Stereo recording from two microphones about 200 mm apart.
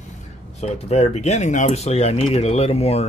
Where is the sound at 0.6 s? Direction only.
35° left (ahead or behind).